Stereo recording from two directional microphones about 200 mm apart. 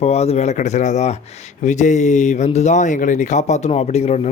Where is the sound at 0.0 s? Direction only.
30° left (ahead or behind).